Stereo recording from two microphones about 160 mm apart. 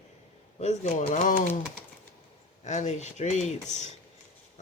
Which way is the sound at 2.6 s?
45° left (ahead or behind).